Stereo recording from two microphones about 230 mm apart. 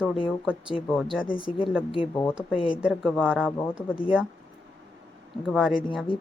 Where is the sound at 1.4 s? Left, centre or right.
Left.